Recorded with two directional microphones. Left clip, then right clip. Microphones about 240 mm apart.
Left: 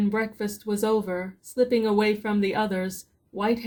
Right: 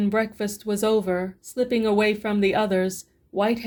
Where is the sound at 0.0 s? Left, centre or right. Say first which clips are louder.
Right 3 dB; right.